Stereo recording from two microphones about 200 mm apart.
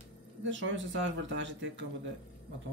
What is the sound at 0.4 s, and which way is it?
Speech, 70° right (ahead or behind).